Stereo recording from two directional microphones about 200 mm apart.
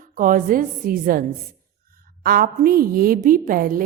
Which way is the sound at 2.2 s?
45° right (ahead or behind).